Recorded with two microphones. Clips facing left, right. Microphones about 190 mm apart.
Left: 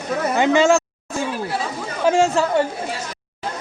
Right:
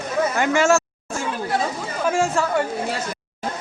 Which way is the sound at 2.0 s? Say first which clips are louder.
Left 4 dB; 25° left (ahead or behind).